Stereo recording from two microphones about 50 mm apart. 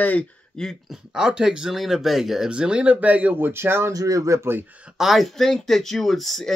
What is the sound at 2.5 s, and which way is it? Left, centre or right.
Speech, centre.